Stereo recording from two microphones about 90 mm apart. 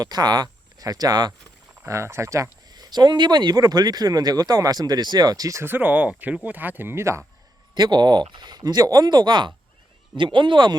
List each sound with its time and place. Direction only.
0.0 s speech: 50° right (ahead or behind)
1.9 s speech: 30° right (ahead or behind)
2.6 s speech: 50° right (ahead or behind)
5.6 s speech: 20° right (ahead or behind)
7.8 s speech: 55° right (ahead or behind)